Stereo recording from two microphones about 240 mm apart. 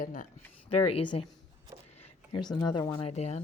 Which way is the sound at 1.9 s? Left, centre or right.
Left.